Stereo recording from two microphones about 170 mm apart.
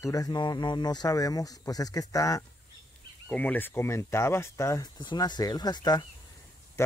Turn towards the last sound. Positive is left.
turn(degrees=15)  # may be behind; listen again after turning